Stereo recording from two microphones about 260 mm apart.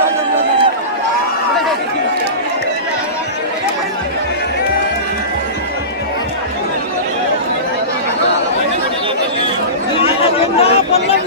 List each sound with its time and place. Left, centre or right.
10.6 s chatter: left